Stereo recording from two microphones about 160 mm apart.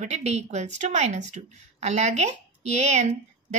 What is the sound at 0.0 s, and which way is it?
Speech, 45° right (ahead or behind).